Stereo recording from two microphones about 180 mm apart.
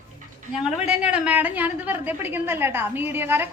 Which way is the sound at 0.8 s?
5° right (ahead or behind).